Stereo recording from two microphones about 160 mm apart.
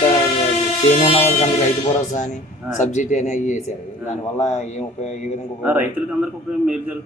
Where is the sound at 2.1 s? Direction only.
50° left (ahead or behind).